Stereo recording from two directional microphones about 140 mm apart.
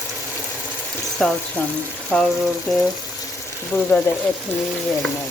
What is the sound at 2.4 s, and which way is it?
Water, centre (ahead or behind).